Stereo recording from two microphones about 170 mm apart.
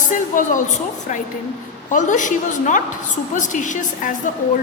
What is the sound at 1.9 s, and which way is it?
A woman's voice, 50° left (ahead or behind).